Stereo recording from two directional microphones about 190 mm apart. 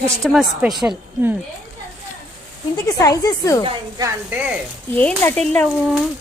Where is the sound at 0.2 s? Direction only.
Centre (ahead or behind).